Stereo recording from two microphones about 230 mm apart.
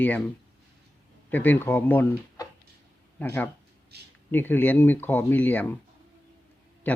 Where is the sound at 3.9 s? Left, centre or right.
Right.